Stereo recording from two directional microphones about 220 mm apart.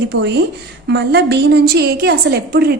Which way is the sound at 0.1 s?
50° right (ahead or behind).